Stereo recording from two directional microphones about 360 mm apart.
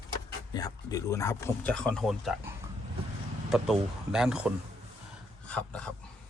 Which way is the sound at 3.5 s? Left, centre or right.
Centre.